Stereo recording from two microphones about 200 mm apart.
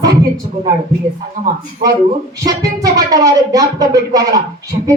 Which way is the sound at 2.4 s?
20° right (ahead or behind).